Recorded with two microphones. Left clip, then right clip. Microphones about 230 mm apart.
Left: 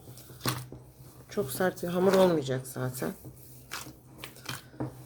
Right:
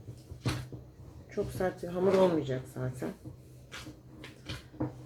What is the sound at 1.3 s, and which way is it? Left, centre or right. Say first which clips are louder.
Speech: left 3 dB; left.